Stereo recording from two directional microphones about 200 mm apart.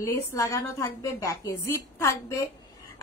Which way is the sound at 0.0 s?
15° left (ahead or behind).